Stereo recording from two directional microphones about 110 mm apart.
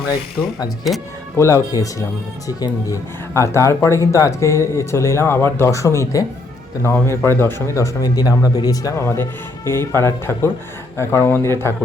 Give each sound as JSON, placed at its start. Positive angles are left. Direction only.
{"t": 0.4, "sound": "speech", "side_deg": 30}
{"t": 8.0, "sound": "speech", "side_deg": 35}